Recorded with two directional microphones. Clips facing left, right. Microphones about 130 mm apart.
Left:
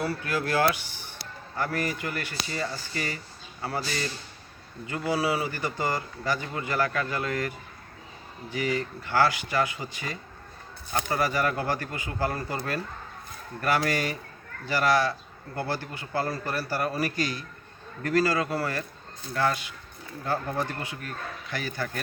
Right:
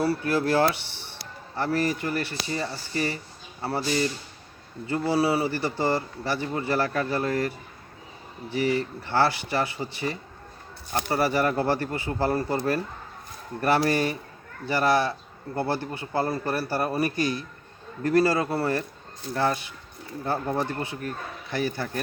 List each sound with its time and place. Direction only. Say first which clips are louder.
0.0 s a man's voice: right 5 dB; 30° right (ahead or behind)
8.5 s a man's voice: right 4 dB; 30° right (ahead or behind)